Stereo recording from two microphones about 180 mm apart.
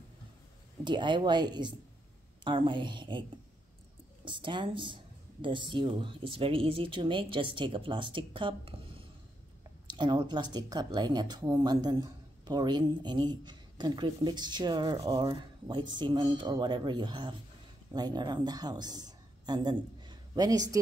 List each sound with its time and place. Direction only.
0.8 s a woman's voice: 25° right (ahead or behind)